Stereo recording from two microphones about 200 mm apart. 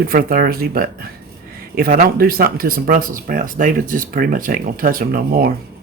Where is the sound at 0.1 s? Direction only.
45° right (ahead or behind).